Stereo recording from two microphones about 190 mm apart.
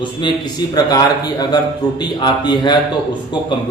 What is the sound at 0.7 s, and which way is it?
Speech, 20° left (ahead or behind).